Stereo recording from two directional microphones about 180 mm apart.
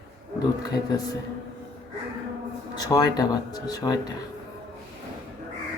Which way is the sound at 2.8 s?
20° left (ahead or behind).